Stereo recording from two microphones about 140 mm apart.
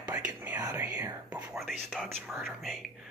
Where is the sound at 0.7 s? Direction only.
15° right (ahead or behind).